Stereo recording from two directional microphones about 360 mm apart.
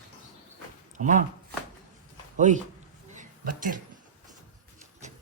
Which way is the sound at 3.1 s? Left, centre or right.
Right.